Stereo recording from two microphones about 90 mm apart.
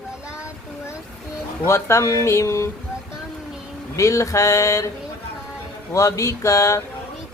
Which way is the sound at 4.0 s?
35° left (ahead or behind).